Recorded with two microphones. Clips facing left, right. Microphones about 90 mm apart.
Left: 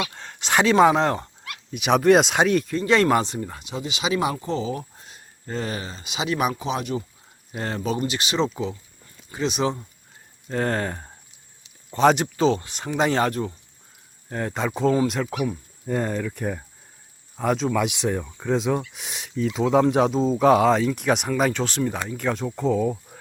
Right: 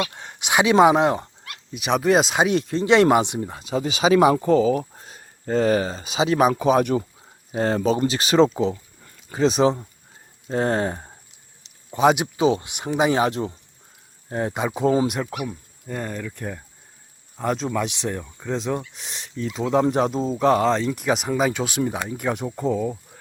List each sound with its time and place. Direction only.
0.1 s speech: 15° right (ahead or behind)
1.5 s speech: centre (ahead or behind)
2.5 s speech: 25° right (ahead or behind)
3.6 s speech: 35° right (ahead or behind)
6.5 s speech: 45° right (ahead or behind)
7.5 s speech: 35° right (ahead or behind)
10.5 s speech: 20° right (ahead or behind); by 15.5 s 5° right (ahead or behind)
15.9 s speech: 15° left (ahead or behind)
17.3 s speech: centre (ahead or behind)